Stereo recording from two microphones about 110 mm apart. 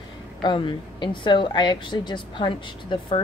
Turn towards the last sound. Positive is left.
turn(degrees=45)  # may be behind; listen again after turning